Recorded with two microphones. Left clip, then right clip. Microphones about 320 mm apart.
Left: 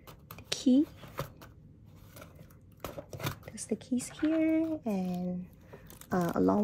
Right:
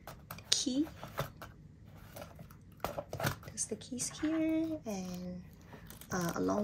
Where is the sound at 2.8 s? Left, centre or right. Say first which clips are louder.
Right 3 dB; centre.